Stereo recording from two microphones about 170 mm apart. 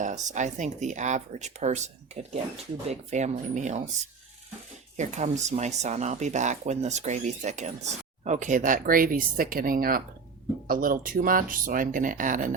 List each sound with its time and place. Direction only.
0.0 s speech: 45° right (ahead or behind)
4.9 s speech: 45° right (ahead or behind)